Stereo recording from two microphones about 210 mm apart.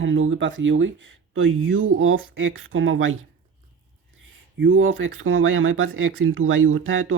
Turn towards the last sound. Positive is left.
turn(degrees=-70)  # may be behind; listen again after turning